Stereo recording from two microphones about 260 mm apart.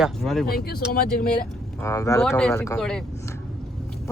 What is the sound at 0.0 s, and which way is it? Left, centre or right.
Speech, centre.